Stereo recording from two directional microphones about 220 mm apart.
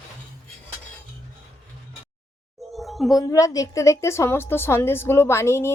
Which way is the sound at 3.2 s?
15° left (ahead or behind).